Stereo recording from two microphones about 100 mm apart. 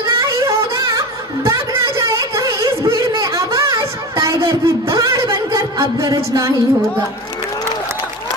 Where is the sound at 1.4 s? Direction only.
30° right (ahead or behind).